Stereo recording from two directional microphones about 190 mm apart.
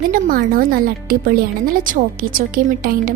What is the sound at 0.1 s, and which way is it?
Speech, 45° right (ahead or behind).